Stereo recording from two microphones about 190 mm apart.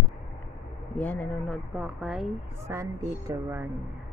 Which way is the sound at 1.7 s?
5° right (ahead or behind).